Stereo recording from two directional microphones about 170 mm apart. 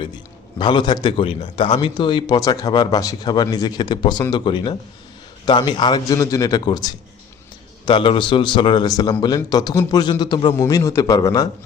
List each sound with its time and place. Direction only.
0.6 s a man's voice: 25° left (ahead or behind)